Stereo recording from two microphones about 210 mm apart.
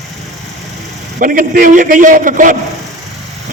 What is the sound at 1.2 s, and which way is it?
A man's voice, 40° right (ahead or behind).